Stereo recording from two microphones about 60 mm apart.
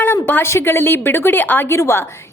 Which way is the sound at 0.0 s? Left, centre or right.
Left.